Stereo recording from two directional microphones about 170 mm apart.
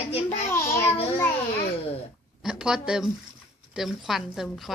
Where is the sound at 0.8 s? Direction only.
35° left (ahead or behind).